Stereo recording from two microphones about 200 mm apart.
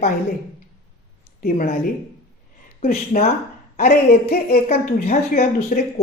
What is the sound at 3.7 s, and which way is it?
Speech, 45° left (ahead or behind).